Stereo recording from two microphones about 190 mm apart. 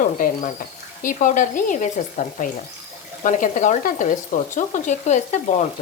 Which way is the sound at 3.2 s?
40° left (ahead or behind).